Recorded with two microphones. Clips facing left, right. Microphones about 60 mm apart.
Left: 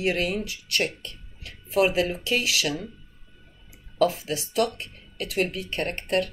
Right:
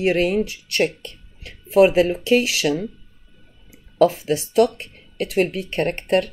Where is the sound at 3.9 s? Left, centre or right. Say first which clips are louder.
Right 6 dB; right.